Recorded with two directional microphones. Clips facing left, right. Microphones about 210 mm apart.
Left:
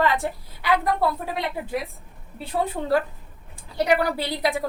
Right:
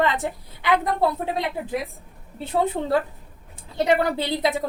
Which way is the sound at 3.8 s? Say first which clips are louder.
Right 1 dB; 25° right (ahead or behind).